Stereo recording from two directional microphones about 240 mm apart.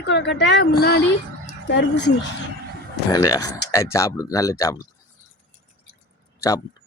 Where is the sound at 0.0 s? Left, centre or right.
Left.